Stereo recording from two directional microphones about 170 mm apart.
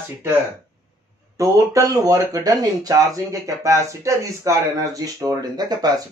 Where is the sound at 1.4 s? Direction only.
20° right (ahead or behind).